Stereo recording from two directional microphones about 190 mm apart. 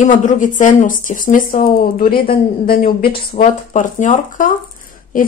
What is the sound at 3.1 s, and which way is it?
Speech, 25° left (ahead or behind).